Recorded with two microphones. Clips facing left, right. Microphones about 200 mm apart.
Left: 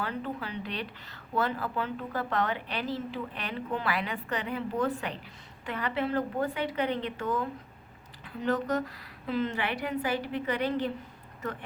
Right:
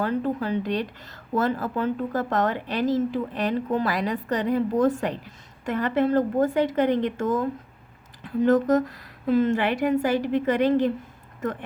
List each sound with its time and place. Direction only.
0.0 s speech: 45° right (ahead or behind)